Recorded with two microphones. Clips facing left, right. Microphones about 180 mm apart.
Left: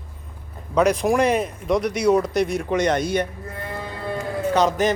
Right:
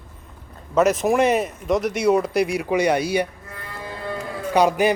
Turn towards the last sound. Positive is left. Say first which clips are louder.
# right 2 dB
turn(degrees=-10)  # may be behind; listen again after turning